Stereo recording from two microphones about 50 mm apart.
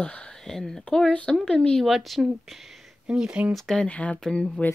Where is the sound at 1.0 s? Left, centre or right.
Left.